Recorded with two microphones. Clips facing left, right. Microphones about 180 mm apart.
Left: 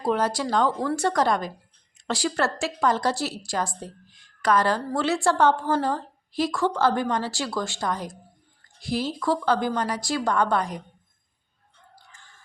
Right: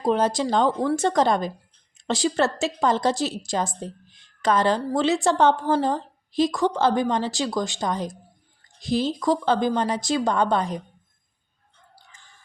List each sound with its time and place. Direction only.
0.0 s a woman's voice: 20° right (ahead or behind)